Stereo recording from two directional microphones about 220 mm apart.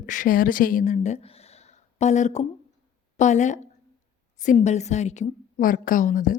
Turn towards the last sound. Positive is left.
turn(degrees=35)  # may be behind; listen again after turning